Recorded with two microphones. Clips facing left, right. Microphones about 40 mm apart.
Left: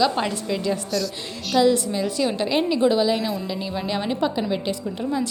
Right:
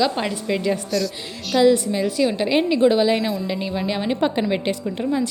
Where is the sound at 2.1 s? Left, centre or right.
Centre.